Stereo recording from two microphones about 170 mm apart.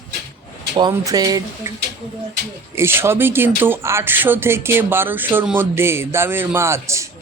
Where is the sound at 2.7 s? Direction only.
15° right (ahead or behind).